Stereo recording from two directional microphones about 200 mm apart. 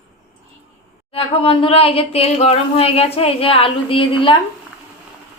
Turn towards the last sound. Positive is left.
turn(degrees=25)  # may be behind; listen again after turning